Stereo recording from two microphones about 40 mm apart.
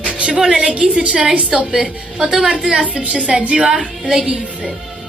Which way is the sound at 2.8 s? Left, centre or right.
Right.